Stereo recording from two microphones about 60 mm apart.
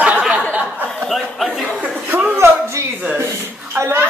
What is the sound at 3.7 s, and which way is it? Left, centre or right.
Speech, right.